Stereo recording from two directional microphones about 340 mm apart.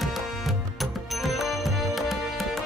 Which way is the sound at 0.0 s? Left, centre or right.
Centre.